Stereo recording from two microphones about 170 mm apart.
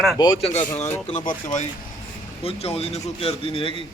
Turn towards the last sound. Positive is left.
turn(degrees=30)  # may be behind; listen again after turning